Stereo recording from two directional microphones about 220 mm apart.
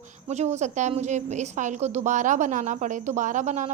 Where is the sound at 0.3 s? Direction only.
30° right (ahead or behind).